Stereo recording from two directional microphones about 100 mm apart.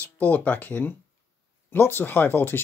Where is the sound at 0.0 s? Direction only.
15° left (ahead or behind).